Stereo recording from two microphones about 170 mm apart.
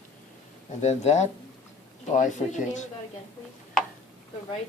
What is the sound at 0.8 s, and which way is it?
Speech, 40° left (ahead or behind).